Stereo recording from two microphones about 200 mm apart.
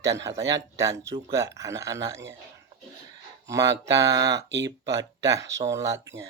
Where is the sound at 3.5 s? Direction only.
15° right (ahead or behind).